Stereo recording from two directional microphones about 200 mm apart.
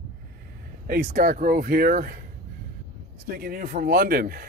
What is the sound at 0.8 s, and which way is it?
Speech, 50° right (ahead or behind).